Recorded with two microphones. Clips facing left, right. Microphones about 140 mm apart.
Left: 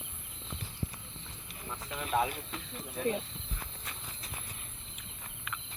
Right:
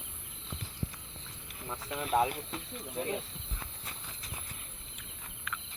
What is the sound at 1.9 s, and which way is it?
Speech, 5° right (ahead or behind).